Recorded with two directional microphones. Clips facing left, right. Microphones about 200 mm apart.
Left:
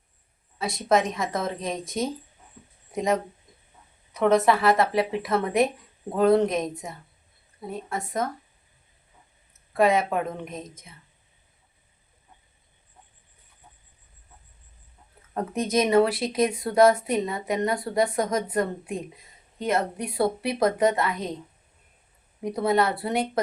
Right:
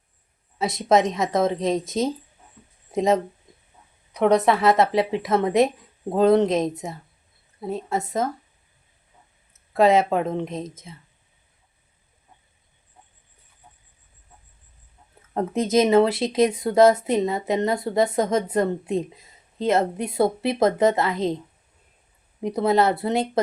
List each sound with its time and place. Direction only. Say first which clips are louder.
0.6 s speech: right 4 dB; 20° right (ahead or behind)
9.7 s speech: right 4 dB; 25° right (ahead or behind)
15.4 s speech: right 4 dB; 25° right (ahead or behind)
22.4 s speech: right 3 dB; 25° right (ahead or behind)